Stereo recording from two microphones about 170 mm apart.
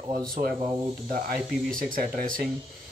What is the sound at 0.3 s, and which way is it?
Speech, 60° right (ahead or behind).